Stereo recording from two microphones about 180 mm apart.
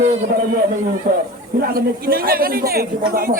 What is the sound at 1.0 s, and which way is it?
A man's voice, 45° right (ahead or behind).